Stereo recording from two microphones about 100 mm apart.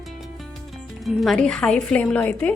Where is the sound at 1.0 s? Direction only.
Centre (ahead or behind).